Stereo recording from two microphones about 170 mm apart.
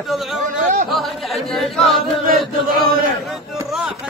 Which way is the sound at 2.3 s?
60° right (ahead or behind).